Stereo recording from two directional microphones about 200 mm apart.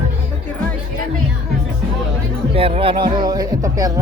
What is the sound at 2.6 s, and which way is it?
Speech, 30° right (ahead or behind).